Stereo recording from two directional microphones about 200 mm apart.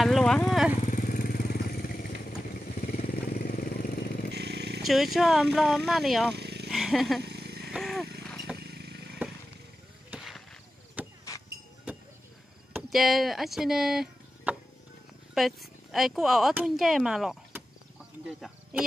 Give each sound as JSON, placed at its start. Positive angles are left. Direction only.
{"t": 0.0, "sound": "speech", "side_deg": 0}
{"t": 0.8, "sound": "motorcycle", "side_deg": 45}
{"t": 4.3, "sound": "vehicle", "side_deg": -55}
{"t": 4.8, "sound": "speech", "side_deg": 0}
{"t": 6.3, "sound": "a sound", "side_deg": -55}
{"t": 6.7, "sound": "speech", "side_deg": 0}
{"t": 7.2, "sound": "vehicle", "side_deg": -55}
{"t": 7.7, "sound": "wild animals", "side_deg": 0}
{"t": 8.5, "sound": "a sound", "side_deg": -55}
{"t": 9.2, "sound": "a sound", "side_deg": -10}
{"t": 10.1, "sound": "vehicle", "side_deg": 0}
{"t": 11.0, "sound": "a sound", "side_deg": -10}
{"t": 12.9, "sound": "speech", "side_deg": 0}